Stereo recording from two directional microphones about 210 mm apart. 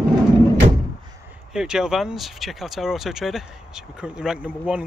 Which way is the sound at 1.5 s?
5° right (ahead or behind).